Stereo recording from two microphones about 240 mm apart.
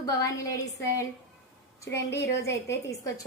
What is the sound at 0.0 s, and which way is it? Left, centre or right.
A woman's voice, centre.